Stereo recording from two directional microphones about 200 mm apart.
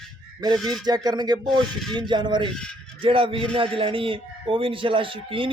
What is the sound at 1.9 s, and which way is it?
Speech, 25° right (ahead or behind).